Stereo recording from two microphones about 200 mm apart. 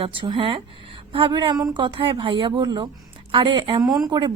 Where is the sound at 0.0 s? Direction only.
25° right (ahead or behind).